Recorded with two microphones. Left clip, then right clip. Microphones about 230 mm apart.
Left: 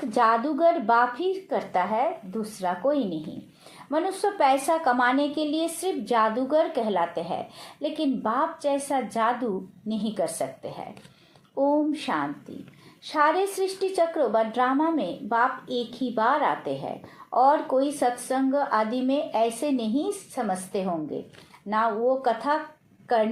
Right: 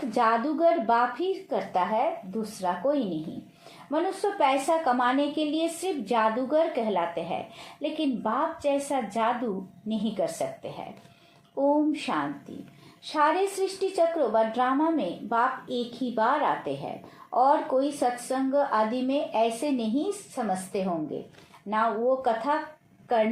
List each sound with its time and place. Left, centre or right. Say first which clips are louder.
0.1 s a woman's voice: left 3 dB; centre